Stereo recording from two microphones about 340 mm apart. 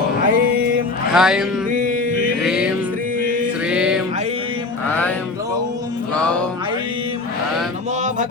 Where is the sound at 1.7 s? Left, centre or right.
Right.